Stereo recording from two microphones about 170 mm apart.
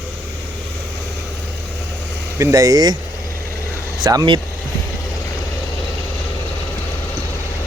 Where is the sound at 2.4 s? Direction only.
20° right (ahead or behind).